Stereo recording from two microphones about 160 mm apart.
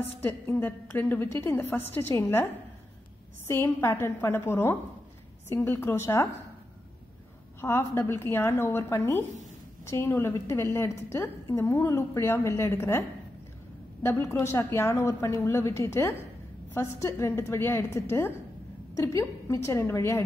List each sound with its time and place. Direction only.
0.2 s a woman's voice: 15° left (ahead or behind)
3.4 s a woman's voice: 15° left (ahead or behind)
7.6 s a woman's voice: 15° left (ahead or behind)
14.0 s a woman's voice: 15° left (ahead or behind)